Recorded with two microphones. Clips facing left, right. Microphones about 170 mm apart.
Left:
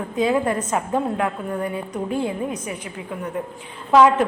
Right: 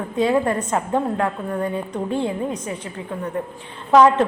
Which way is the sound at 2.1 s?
25° right (ahead or behind).